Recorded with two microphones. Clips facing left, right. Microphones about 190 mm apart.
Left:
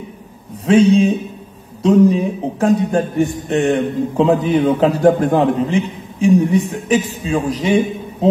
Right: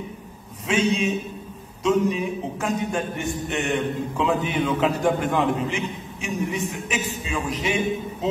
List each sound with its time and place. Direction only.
0.7 s a man's voice: 35° left (ahead or behind)